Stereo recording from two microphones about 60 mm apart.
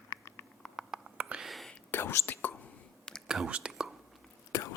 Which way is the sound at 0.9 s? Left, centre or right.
Centre.